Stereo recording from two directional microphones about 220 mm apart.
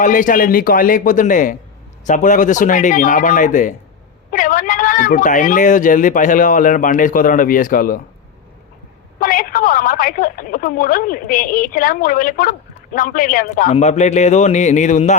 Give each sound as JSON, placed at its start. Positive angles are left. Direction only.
{"t": 0.0, "sound": "a woman's voice", "side_deg": 35}
{"t": 9.1, "sound": "a woman's voice", "side_deg": 40}